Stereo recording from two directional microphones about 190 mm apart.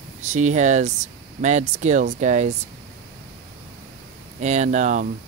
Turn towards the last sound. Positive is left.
turn(degrees=-40)  # may be behind; listen again after turning